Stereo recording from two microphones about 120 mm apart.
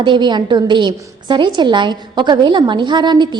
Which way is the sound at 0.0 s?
40° right (ahead or behind).